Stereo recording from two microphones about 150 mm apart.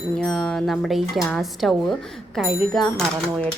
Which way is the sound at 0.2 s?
Centre (ahead or behind).